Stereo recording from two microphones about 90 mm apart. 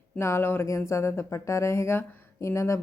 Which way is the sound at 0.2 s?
30° left (ahead or behind).